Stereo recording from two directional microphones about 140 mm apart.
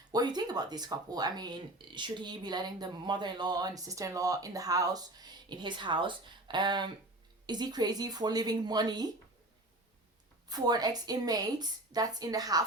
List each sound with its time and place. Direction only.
0.1 s speech: 30° right (ahead or behind)
10.5 s speech: 30° right (ahead or behind)